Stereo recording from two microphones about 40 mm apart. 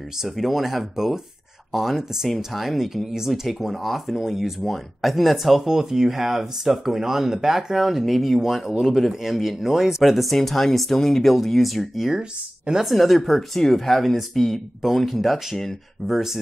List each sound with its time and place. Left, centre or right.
0.2 s speech: centre
12.2 s speech: centre
12.8 s speech: centre